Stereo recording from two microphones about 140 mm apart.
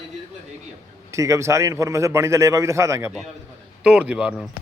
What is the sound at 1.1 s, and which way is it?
A man's voice, 20° right (ahead or behind).